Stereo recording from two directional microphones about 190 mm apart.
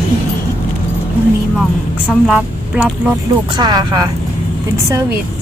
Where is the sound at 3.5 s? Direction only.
20° right (ahead or behind).